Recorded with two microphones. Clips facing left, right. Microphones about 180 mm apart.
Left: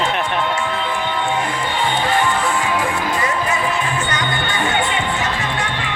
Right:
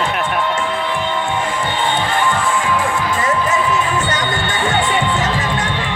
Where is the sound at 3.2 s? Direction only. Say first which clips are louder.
Right 3 dB; 45° right (ahead or behind).